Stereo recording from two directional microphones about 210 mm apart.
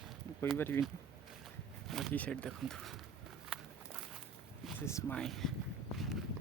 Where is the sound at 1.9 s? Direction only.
Centre (ahead or behind).